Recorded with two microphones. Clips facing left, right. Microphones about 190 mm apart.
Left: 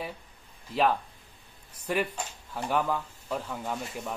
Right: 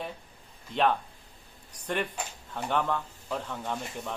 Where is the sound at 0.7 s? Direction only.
5° left (ahead or behind).